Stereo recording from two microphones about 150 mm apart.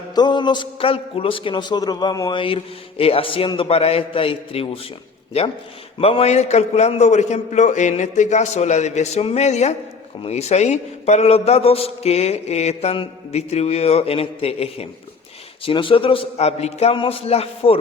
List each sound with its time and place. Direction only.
0.1 s a man's voice: 30° left (ahead or behind)